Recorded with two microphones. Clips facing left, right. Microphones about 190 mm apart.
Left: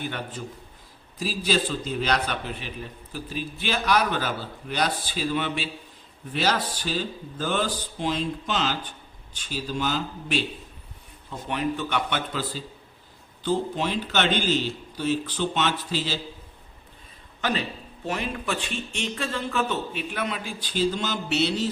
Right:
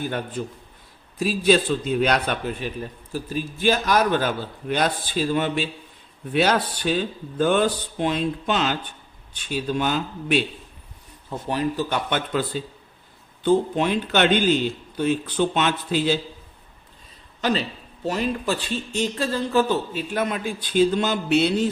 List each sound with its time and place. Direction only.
0.0 s a man's voice: 45° right (ahead or behind)
1.2 s a man's voice: 60° right (ahead or behind)
6.3 s speech: 60° right (ahead or behind)
11.3 s speech: 35° right (ahead or behind)
12.1 s a man's voice: 55° right (ahead or behind)
18.0 s speech: 35° right (ahead or behind); by 21.7 s 55° right (ahead or behind)